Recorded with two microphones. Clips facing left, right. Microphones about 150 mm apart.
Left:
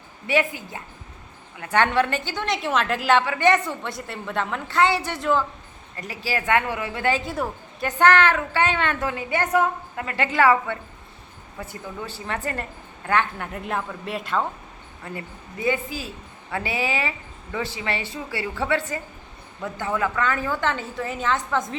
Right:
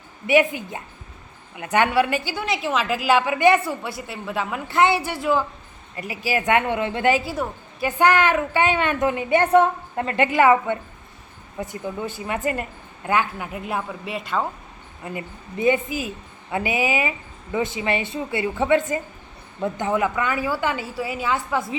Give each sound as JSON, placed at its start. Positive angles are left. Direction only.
{"t": 0.3, "sound": "a woman's voice", "side_deg": -15}
{"t": 7.2, "sound": "a woman's voice", "side_deg": 0}
{"t": 10.2, "sound": "a woman's voice", "side_deg": -20}
{"t": 15.0, "sound": "a woman's voice", "side_deg": -20}